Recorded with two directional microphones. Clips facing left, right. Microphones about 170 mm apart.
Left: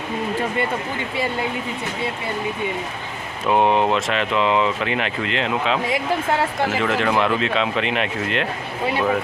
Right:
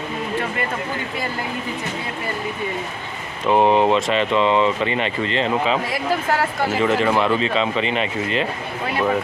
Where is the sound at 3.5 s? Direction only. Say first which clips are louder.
Right 2 dB; centre (ahead or behind).